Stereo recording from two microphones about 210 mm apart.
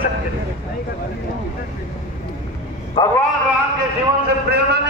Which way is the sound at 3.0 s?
25° left (ahead or behind).